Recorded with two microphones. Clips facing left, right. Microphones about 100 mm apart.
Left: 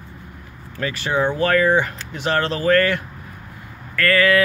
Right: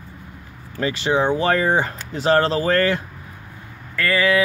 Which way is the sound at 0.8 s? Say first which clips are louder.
Right 2 dB; 25° right (ahead or behind).